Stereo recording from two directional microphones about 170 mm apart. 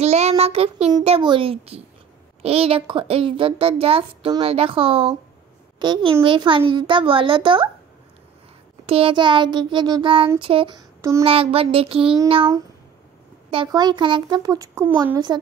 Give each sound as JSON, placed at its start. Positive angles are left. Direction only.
{"t": 0.0, "sound": "child singing", "side_deg": -40}
{"t": 1.0, "sound": "a woman's voice", "side_deg": -30}
{"t": 8.8, "sound": "a child's voice", "side_deg": -30}
{"t": 11.0, "sound": "a child's voice", "side_deg": -15}
{"t": 11.2, "sound": "a woman's voice", "side_deg": -35}
{"t": 13.5, "sound": "a child's voice", "side_deg": -25}